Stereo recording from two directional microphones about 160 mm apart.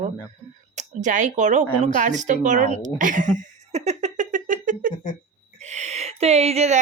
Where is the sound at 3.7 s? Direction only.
45° right (ahead or behind).